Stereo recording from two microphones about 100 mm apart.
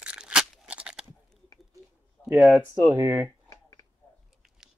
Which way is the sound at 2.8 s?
25° right (ahead or behind).